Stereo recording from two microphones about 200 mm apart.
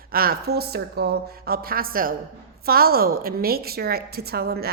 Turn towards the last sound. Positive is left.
turn(degrees=-50)  # may be behind; listen again after turning